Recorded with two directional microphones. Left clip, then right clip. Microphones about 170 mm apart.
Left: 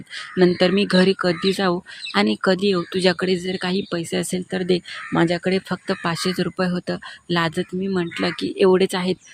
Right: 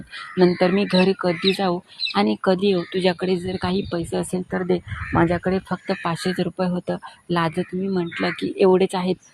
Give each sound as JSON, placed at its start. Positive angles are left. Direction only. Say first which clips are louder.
{"t": 0.3, "sound": "speech", "louder": "left 1 dB", "side_deg": 25}